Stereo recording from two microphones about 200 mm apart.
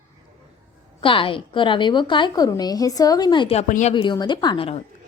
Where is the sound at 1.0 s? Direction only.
25° left (ahead or behind).